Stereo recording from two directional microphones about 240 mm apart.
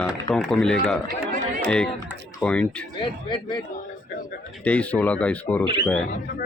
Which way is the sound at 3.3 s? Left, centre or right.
Centre.